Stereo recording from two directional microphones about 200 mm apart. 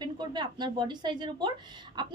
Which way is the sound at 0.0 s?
20° right (ahead or behind).